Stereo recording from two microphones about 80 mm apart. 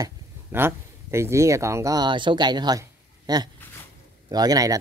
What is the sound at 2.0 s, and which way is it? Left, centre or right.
Speech, right.